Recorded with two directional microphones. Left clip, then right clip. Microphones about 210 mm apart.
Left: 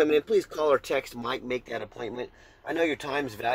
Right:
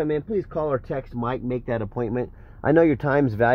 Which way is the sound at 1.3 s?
20° right (ahead or behind).